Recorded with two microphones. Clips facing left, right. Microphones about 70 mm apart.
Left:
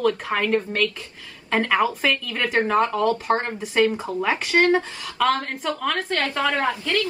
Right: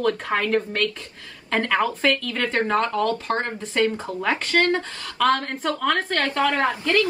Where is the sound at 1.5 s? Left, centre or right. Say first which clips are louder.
Left 1 dB; centre.